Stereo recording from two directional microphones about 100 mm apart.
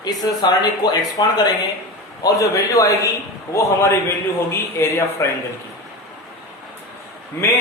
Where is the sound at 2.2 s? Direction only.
35° left (ahead or behind).